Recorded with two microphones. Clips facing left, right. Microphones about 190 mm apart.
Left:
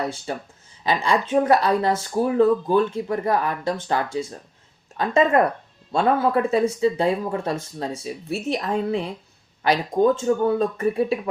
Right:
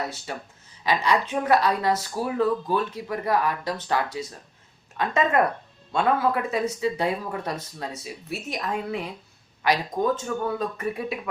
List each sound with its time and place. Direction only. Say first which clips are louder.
0.0 s speech: left 5 dB; 30° left (ahead or behind)